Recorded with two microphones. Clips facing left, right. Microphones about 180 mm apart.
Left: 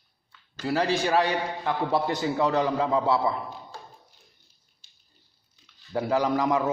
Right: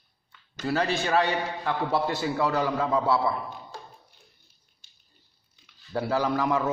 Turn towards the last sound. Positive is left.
turn(degrees=20)  # may be behind; listen again after turning